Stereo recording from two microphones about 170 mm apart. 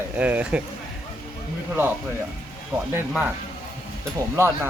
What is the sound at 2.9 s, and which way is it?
Speech, 10° right (ahead or behind).